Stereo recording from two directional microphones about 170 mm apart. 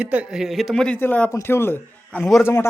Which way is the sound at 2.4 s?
15° left (ahead or behind).